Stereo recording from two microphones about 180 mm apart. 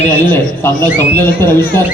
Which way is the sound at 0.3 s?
10° left (ahead or behind).